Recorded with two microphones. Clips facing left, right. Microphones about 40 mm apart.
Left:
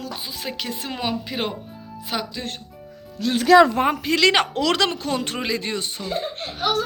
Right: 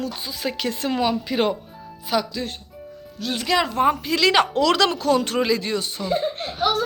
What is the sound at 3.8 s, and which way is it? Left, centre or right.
Speech, left.